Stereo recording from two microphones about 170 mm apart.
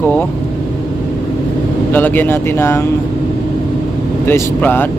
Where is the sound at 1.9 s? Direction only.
10° left (ahead or behind).